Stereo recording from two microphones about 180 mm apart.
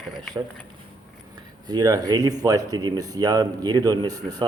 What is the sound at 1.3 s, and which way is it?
Speech, 20° right (ahead or behind).